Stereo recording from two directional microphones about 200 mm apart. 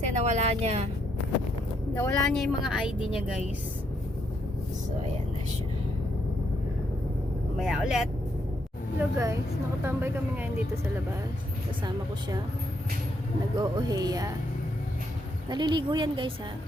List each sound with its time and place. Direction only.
0.0 s a woman's voice: 35° right (ahead or behind)
2.0 s speech: 5° left (ahead or behind)
3.0 s speech: 25° left (ahead or behind)
7.6 s speech: 5° right (ahead or behind)
9.0 s speech: 15° right (ahead or behind)
13.6 s a woman's voice: 20° right (ahead or behind)
15.4 s a woman's voice: 20° right (ahead or behind)